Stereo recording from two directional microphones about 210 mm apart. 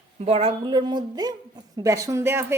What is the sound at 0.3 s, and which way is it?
A woman's voice, 30° right (ahead or behind).